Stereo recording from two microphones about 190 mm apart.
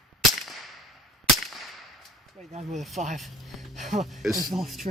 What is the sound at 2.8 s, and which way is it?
Speech, centre (ahead or behind).